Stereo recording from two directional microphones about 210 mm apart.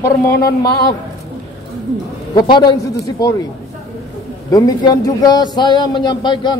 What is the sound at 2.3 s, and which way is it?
A man's voice, 20° left (ahead or behind).